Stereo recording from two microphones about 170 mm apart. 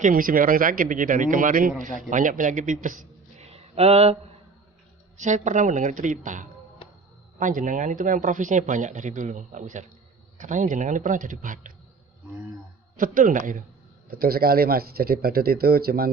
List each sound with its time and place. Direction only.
0.0 s a man's voice: 55° right (ahead or behind)
6.8 s a sound: 30° left (ahead or behind)
7.3 s speech: 50° right (ahead or behind)
13.0 s speech: 50° right (ahead or behind)
14.1 s speech: 60° right (ahead or behind)